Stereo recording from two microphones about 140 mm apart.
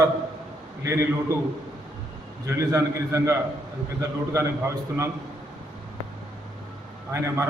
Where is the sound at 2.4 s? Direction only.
20° right (ahead or behind).